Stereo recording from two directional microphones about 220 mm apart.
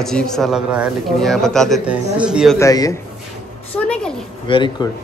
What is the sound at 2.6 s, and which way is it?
A man's voice, 15° left (ahead or behind).